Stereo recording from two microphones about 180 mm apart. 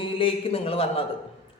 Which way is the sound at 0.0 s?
30° left (ahead or behind).